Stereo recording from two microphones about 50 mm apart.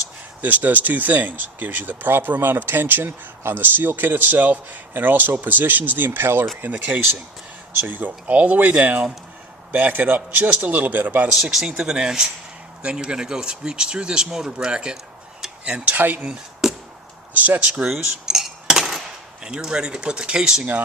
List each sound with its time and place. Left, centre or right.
0.4 s speech: right
11.7 s speech: centre; by 16.2 s right
16.6 s chop: centre
17.3 s speech: right
17.8 s cutlery: centre